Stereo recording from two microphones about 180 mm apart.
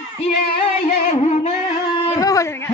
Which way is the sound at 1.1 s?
35° left (ahead or behind).